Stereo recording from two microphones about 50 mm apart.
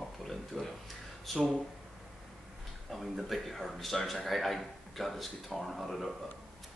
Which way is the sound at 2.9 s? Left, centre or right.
Centre.